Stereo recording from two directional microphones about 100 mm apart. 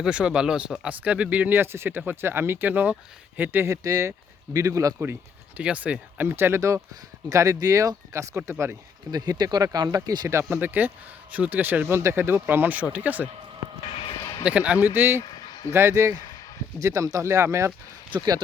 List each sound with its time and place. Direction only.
0.0 s speech: 10° right (ahead or behind)
3.8 s speech: 35° right (ahead or behind)
5.5 s speech: 15° right (ahead or behind)
9.1 s speech: 40° right (ahead or behind)
10.2 s speech: 25° right (ahead or behind)
13.8 s a sound: 75° left (ahead or behind)
14.2 s a sound: 45° left (ahead or behind)
14.4 s speech: 15° right (ahead or behind)
15.2 s a sound: 45° left (ahead or behind)
15.7 s speech: 30° right (ahead or behind)